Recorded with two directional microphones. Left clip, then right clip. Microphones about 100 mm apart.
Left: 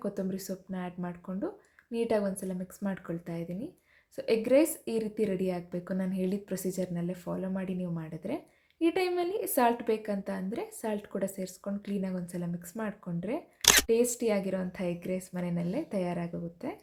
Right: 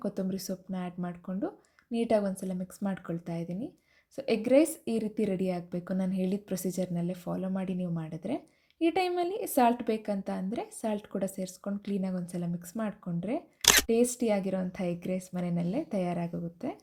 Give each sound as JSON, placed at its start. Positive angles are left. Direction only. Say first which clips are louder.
{"t": 0.0, "sound": "a woman's voice", "louder": "even", "side_deg": -25}
{"t": 13.6, "sound": "camera", "louder": "even", "side_deg": 0}
{"t": 13.8, "sound": "a woman's voice", "louder": "even", "side_deg": -20}